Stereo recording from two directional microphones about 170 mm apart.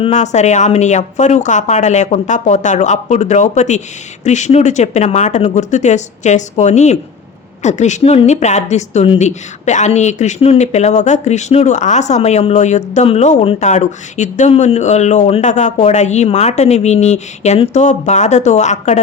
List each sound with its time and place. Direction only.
0.0 s speech: 45° left (ahead or behind)